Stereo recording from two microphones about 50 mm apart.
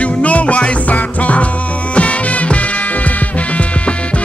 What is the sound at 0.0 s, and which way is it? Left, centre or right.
Music, left.